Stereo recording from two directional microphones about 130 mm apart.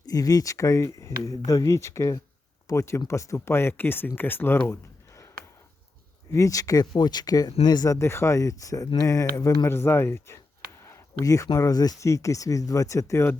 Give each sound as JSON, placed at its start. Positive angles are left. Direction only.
{"t": 0.0, "sound": "speech", "side_deg": 30}
{"t": 6.3, "sound": "speech", "side_deg": 25}